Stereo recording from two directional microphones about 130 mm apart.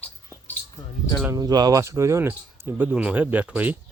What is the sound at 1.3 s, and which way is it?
Speech, 30° right (ahead or behind).